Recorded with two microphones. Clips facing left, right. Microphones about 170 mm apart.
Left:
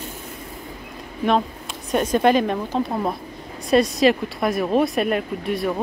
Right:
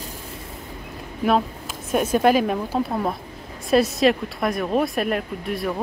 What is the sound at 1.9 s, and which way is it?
Speech, 5° right (ahead or behind).